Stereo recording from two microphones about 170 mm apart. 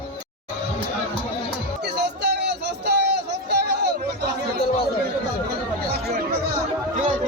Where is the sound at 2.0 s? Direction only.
80° right.